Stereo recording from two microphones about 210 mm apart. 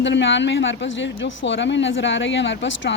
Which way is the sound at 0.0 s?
60° left (ahead or behind).